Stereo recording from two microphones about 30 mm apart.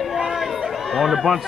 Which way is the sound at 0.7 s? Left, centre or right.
Centre.